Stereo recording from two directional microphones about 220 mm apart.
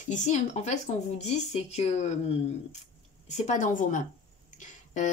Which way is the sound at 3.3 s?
30° left (ahead or behind).